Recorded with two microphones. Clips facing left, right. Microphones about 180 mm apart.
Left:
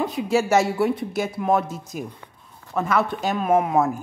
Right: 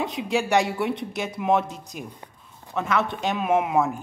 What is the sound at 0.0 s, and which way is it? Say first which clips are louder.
Speech: left 4 dB; centre (ahead or behind).